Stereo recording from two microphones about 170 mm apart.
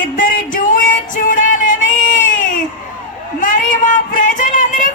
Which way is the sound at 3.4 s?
50° left (ahead or behind).